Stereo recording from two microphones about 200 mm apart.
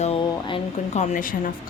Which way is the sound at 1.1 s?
40° left (ahead or behind).